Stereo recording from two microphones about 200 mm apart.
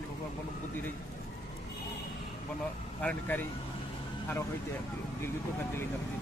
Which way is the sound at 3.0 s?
10° left (ahead or behind).